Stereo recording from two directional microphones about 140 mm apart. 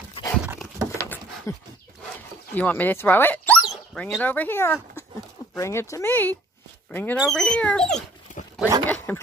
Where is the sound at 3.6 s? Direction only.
Centre (ahead or behind).